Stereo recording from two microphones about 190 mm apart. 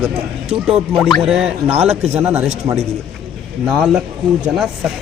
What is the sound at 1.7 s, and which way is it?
Speech, 35° right (ahead or behind).